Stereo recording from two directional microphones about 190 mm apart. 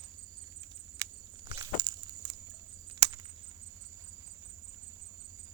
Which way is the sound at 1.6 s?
20° right (ahead or behind).